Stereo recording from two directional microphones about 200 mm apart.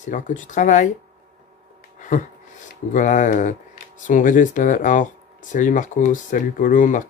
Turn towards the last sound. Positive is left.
turn(degrees=40)  # may be behind; listen again after turning